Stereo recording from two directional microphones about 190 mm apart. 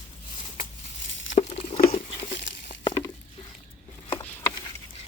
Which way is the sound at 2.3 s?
65° left (ahead or behind).